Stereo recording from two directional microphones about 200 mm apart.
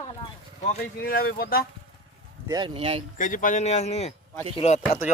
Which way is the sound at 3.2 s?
40° left (ahead or behind).